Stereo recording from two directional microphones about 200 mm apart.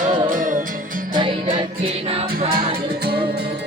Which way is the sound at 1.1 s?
25° right (ahead or behind).